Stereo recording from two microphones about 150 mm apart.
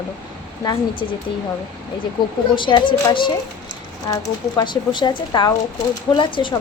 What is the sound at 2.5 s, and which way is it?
A woman's voice, 30° left (ahead or behind).